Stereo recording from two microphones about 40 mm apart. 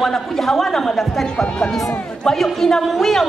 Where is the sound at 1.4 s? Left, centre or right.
Centre.